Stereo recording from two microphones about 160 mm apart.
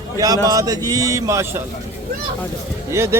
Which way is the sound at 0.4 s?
25° right (ahead or behind).